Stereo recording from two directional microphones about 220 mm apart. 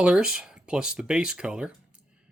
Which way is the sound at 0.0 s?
5° right (ahead or behind).